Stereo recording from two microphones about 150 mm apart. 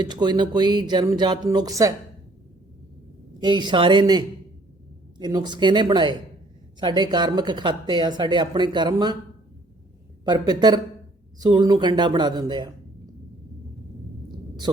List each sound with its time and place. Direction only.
0.0 s speech: 30° right (ahead or behind)
3.4 s speech: 30° right (ahead or behind)
10.2 s speech: 25° right (ahead or behind)